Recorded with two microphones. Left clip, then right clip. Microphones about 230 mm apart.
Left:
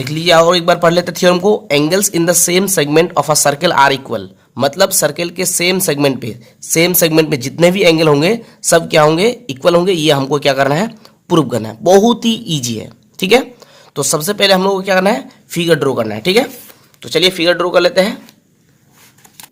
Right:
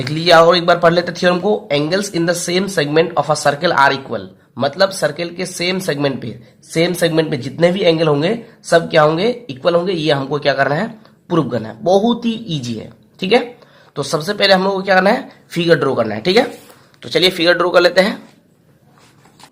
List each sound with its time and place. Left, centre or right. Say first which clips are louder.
0.0 s speech: even; left